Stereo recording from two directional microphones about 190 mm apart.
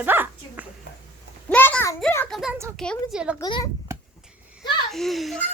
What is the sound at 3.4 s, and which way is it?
Speech, 20° left (ahead or behind).